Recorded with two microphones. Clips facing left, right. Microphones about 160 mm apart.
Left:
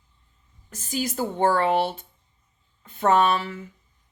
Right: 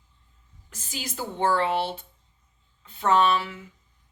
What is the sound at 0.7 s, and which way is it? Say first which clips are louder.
A woman's voice: left 9 dB; 45° left (ahead or behind).